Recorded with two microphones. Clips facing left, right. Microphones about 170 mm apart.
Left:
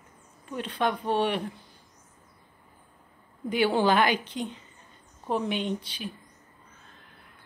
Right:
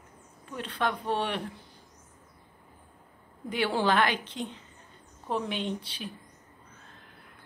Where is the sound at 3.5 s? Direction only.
5° left (ahead or behind).